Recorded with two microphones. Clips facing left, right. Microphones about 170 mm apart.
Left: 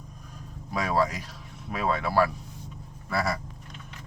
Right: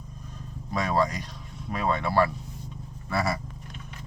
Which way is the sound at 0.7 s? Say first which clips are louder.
Even; 5° left (ahead or behind).